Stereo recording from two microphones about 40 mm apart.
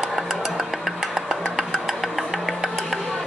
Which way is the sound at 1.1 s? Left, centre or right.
Centre.